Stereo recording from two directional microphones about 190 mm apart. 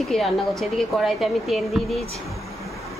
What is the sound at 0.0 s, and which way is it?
Speech, centre (ahead or behind).